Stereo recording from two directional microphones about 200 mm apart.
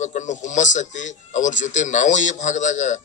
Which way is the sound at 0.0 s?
35° left (ahead or behind).